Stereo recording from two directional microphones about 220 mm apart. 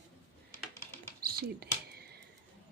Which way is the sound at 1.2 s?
45° right (ahead or behind).